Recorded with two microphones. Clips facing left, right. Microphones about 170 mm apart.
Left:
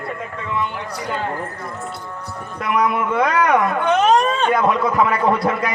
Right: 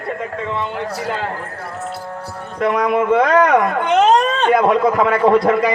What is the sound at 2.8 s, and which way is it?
Speech, 50° right (ahead or behind).